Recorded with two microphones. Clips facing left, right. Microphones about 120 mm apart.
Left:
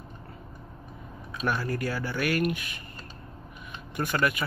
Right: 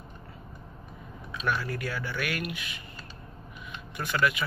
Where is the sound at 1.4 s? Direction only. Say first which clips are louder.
Left 2 dB; 40° left (ahead or behind).